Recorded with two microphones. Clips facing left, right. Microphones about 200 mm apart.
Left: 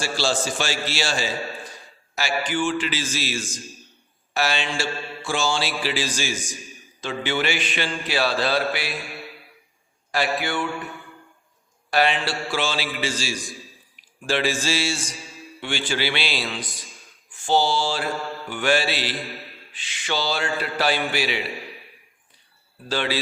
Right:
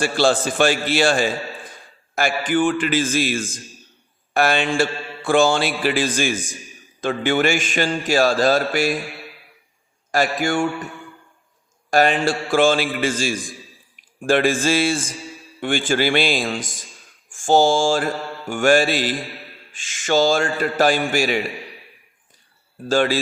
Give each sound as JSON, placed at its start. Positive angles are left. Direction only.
{"t": 0.0, "sound": "a man's voice", "side_deg": -55}
{"t": 7.0, "sound": "mantra", "side_deg": -50}
{"t": 10.1, "sound": "mantra", "side_deg": -45}
{"t": 11.9, "sound": "mantra", "side_deg": -45}
{"t": 13.9, "sound": "speech", "side_deg": -50}
{"t": 15.6, "sound": "mantra", "side_deg": -50}
{"t": 22.9, "sound": "mantra", "side_deg": -45}